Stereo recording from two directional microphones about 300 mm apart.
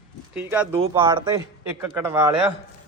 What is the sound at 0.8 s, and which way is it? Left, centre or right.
Speech, centre.